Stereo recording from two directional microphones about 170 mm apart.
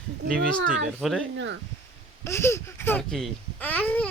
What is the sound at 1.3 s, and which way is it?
Speech, 90° right.